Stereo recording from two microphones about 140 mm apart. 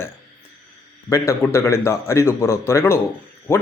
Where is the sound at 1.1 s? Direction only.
20° left (ahead or behind).